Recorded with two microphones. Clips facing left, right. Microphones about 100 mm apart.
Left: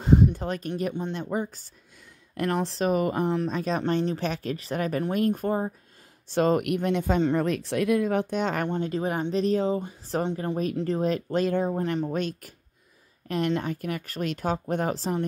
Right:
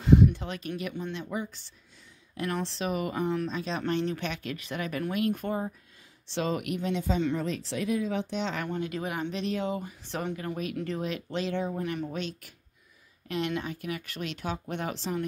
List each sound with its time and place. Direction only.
0.0 s a sound: 40° left (ahead or behind)
1.1 s speech: 45° left (ahead or behind)
4.0 s speech: 35° left (ahead or behind); by 8.6 s 50° left (ahead or behind)
8.6 s speech: 30° left (ahead or behind)